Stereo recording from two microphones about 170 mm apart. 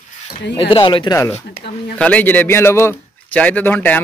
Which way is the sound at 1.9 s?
10° left (ahead or behind).